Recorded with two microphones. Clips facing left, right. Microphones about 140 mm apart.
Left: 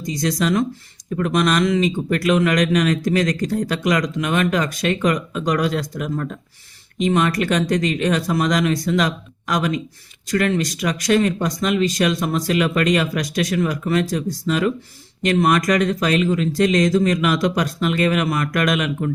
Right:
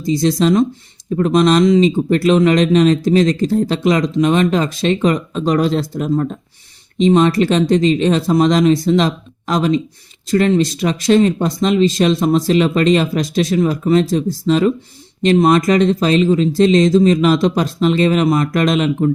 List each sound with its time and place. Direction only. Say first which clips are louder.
0.0 s speech: right 7 dB; 25° right (ahead or behind)